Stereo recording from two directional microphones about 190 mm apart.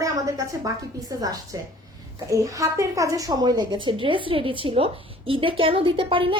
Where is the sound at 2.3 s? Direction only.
15° right (ahead or behind).